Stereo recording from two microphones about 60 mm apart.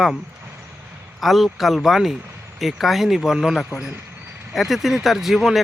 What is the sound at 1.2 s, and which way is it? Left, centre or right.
Speech, centre.